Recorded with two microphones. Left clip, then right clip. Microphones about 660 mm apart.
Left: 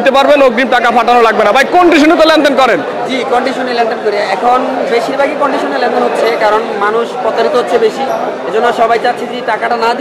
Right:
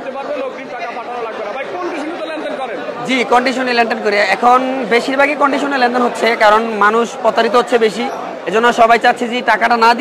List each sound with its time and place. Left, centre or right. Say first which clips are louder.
3.7 s a woman's voice: left 1 dB; right